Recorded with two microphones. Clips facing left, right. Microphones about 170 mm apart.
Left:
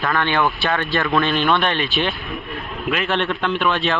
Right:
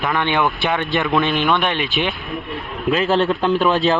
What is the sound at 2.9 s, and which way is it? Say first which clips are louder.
A man's voice: right 5 dB; 30° right (ahead or behind).